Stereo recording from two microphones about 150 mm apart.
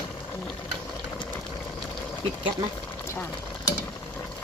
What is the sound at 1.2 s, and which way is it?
Vehicle, 30° left (ahead or behind).